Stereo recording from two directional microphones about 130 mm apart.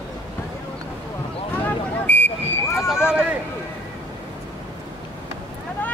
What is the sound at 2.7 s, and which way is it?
Horse, centre (ahead or behind).